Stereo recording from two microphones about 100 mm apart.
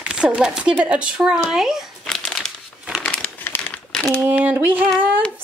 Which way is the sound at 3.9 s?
5° left (ahead or behind).